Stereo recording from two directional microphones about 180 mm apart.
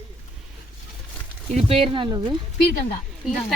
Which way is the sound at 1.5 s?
35° right (ahead or behind).